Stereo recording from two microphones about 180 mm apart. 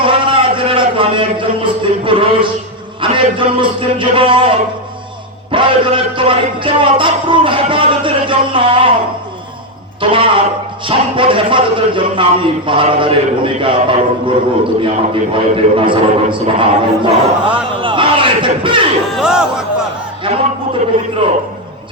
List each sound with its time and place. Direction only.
0.0 s a sound: 30° right (ahead or behind)
3.0 s a man's voice: 30° right (ahead or behind)
5.5 s a man's voice: 30° right (ahead or behind)
10.0 s a man's voice: 30° right (ahead or behind)
19.1 s speech: 5° right (ahead or behind)
21.2 s a man's voice: 30° right (ahead or behind)